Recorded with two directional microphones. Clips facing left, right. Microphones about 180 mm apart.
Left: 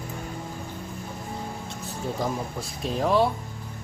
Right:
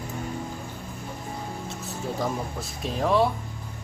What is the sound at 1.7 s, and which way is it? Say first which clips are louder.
Speech: even; centre (ahead or behind).